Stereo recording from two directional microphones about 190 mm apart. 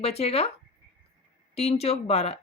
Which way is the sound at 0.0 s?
30° left (ahead or behind).